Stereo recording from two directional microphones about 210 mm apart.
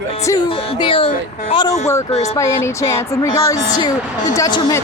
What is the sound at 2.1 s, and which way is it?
Speech, 30° left (ahead or behind).